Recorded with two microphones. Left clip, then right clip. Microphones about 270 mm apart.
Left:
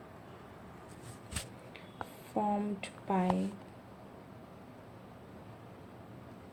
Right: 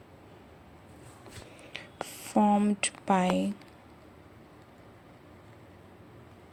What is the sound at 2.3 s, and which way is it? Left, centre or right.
Speech, right.